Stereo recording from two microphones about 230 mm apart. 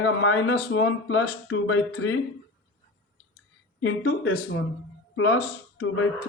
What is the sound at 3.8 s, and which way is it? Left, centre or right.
Speech, left.